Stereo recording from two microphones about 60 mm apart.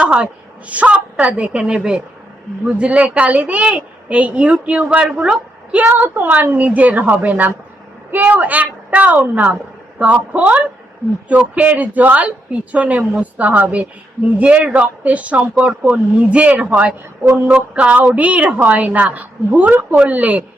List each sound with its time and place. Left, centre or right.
0.0 s a sound: centre
0.7 s speech: right
5.8 s a woman's voice: right